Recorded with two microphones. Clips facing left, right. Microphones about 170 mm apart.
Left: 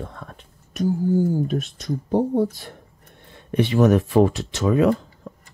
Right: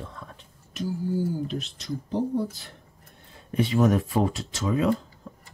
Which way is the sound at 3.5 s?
70° left (ahead or behind).